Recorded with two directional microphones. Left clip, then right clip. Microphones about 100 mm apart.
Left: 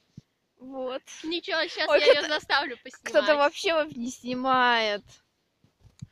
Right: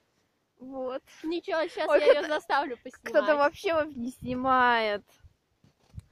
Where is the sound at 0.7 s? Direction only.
45° left (ahead or behind).